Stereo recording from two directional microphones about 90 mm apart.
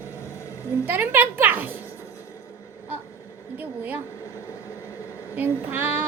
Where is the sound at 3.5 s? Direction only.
20° right (ahead or behind).